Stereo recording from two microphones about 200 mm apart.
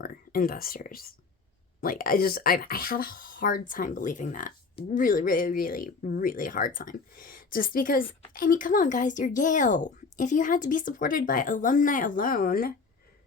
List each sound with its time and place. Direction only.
0.0 s speech: 45° left (ahead or behind)